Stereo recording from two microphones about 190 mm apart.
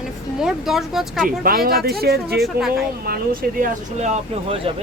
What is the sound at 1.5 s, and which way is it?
Speech, 50° right (ahead or behind).